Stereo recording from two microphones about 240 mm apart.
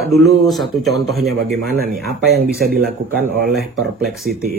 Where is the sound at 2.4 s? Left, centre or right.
Right.